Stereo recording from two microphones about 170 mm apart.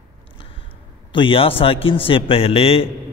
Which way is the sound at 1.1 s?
30° left (ahead or behind).